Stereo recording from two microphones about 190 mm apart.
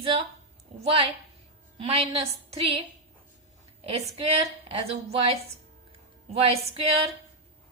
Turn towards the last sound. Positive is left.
turn(degrees=-30)  # may be behind; listen again after turning